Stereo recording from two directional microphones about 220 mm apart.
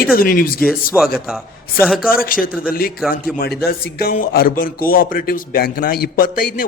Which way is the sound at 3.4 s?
45° left (ahead or behind).